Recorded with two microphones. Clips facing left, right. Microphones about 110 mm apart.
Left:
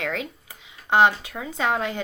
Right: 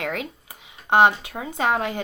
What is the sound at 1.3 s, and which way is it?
Speech, 45° right (ahead or behind).